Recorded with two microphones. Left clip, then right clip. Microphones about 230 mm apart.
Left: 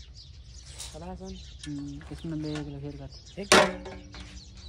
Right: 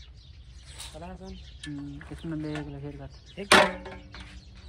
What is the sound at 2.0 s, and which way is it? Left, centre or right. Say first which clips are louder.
Speech: right 1 dB; centre.